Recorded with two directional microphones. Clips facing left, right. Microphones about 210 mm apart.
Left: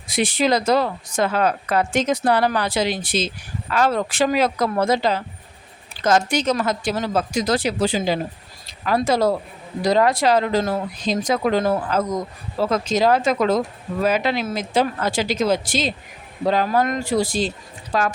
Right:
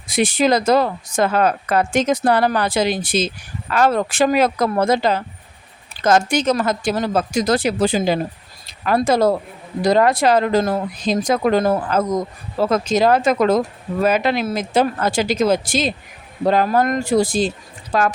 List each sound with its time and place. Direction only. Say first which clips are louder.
0.1 s speech: right 3 dB; 45° right (ahead or behind)